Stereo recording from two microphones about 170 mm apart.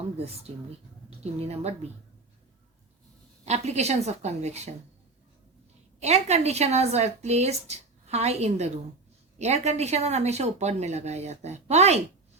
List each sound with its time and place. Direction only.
1.2 s a woman's voice: 35° right (ahead or behind)
3.4 s a woman's voice: 40° right (ahead or behind)
6.0 s a woman's voice: 40° right (ahead or behind)